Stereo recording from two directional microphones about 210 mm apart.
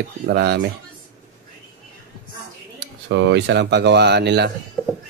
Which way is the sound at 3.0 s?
60° right (ahead or behind).